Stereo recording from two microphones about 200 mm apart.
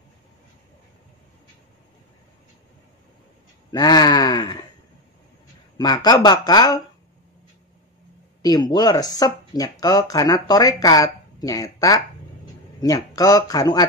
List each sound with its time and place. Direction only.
3.7 s a sound: 20° left (ahead or behind)
5.8 s speech: 20° left (ahead or behind)
8.4 s speech: 20° left (ahead or behind)